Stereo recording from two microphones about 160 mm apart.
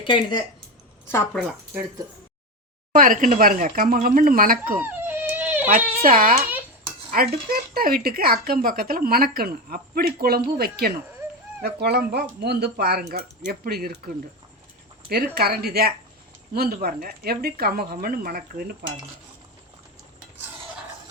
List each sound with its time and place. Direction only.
0.0 s speech: 30° left (ahead or behind)
1.0 s speech: 15° left (ahead or behind)
2.9 s speech: 60° right (ahead or behind)
4.7 s a sound: 10° right (ahead or behind)
6.0 s speech: 60° right (ahead or behind)
11.6 s speech: 85° right
15.4 s speech: 70° right (ahead or behind)